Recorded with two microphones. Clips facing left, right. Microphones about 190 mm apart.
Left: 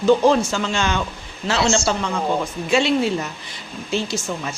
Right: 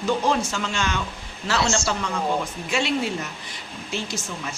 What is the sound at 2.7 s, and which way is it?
Speech, 30° left (ahead or behind).